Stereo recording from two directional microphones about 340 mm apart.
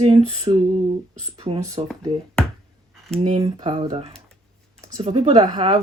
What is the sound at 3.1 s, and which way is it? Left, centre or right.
Speech, centre.